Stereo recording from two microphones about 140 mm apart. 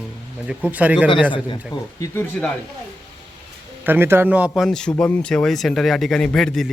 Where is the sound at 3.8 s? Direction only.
15° right (ahead or behind).